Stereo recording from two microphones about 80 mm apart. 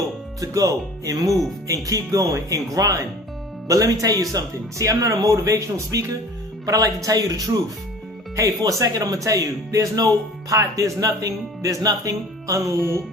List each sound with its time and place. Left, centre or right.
0.3 s speech: right